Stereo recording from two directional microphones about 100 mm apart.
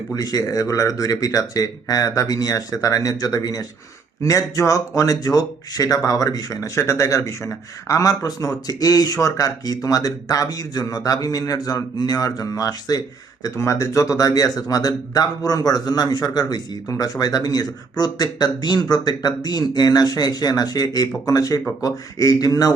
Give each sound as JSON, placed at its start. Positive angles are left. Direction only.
{"t": 0.1, "sound": "speech", "side_deg": 40}